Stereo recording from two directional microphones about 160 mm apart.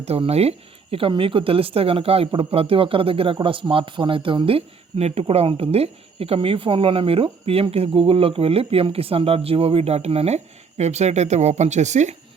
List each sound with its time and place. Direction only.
0.0 s speech: 40° right (ahead or behind)